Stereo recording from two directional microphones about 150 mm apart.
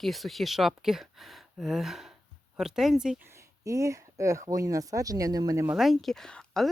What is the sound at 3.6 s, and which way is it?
Speech, 20° right (ahead or behind).